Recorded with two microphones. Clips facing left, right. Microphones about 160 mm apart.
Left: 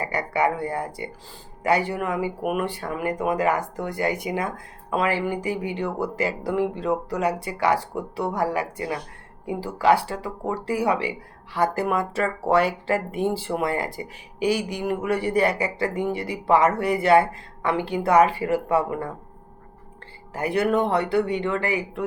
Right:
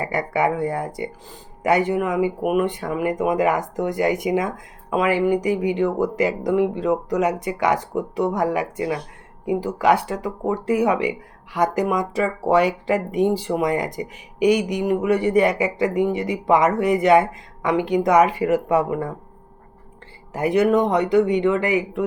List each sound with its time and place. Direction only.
0.0 s speech: 25° right (ahead or behind)
2.4 s speech: centre (ahead or behind)
2.6 s speech: 20° right (ahead or behind)
20.3 s speech: 20° right (ahead or behind)